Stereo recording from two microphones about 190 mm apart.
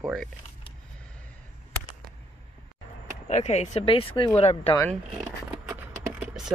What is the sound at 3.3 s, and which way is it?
Speech, 35° left (ahead or behind).